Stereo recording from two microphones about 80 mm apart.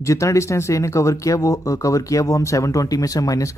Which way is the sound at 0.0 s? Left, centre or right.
Left.